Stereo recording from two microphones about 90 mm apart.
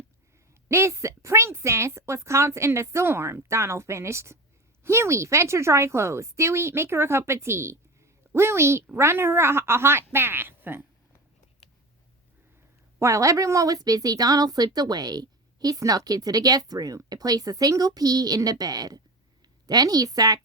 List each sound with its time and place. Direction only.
0.7 s speech: 30° right (ahead or behind)
13.0 s a woman's voice: 35° right (ahead or behind)